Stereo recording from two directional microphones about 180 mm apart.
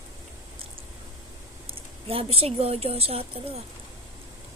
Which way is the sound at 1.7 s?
30° right (ahead or behind).